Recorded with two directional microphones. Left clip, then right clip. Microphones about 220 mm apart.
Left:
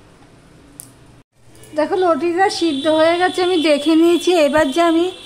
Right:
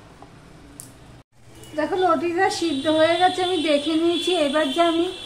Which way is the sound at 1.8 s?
45° left (ahead or behind).